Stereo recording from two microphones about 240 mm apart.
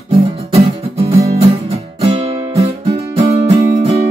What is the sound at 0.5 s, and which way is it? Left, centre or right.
Music, right.